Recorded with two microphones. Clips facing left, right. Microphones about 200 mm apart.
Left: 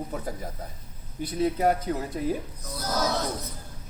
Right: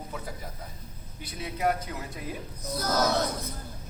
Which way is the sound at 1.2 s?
40° left (ahead or behind).